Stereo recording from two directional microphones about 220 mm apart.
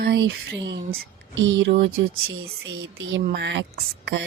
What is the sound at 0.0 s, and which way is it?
A woman's voice, 55° right (ahead or behind).